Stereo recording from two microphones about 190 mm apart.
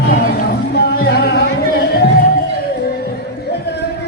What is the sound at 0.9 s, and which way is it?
Music, 60° left (ahead or behind).